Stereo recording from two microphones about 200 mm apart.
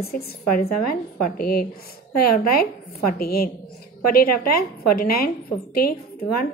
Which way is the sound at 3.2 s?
50° left (ahead or behind).